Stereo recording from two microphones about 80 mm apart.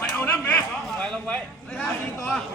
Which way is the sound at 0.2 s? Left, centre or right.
Left.